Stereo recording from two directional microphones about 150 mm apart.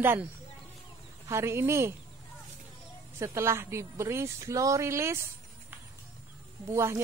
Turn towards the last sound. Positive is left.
turn(degrees=-20)  # may be behind; listen again after turning